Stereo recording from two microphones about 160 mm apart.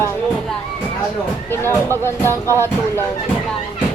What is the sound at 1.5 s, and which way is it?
Speech, 15° left (ahead or behind).